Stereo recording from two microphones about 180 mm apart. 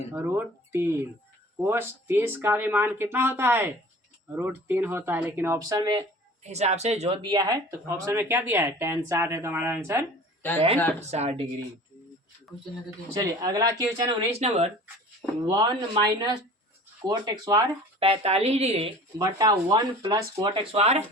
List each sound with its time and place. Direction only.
0.1 s speech: 10° right (ahead or behind)
6.4 s speech: 40° right (ahead or behind); by 10.1 s 15° right (ahead or behind)
11.0 s a woman's voice: 35° right (ahead or behind)
13.1 s speech: 20° right (ahead or behind); by 14.7 s 35° right (ahead or behind)
15.4 s a woman's voice: 25° right (ahead or behind)
19.2 s speech: 20° right (ahead or behind)